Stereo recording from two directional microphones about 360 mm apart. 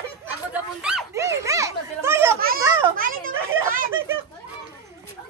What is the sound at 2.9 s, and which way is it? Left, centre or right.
Children playing, right.